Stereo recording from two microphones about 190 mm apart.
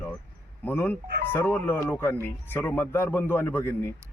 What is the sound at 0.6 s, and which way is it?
Speech, 10° left (ahead or behind).